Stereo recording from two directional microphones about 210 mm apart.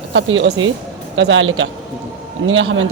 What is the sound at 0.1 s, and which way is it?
A man's voice, 65° right (ahead or behind).